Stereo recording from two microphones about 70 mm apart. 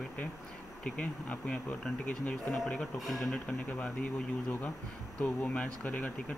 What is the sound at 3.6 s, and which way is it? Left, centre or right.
Speech, centre.